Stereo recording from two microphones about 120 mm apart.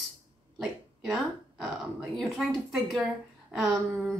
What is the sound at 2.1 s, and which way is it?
A woman's voice, centre (ahead or behind).